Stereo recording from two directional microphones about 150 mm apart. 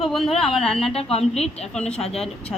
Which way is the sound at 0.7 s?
40° left (ahead or behind).